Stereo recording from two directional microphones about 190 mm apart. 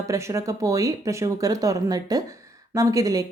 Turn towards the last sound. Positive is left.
turn(degrees=-20)  # may be behind; listen again after turning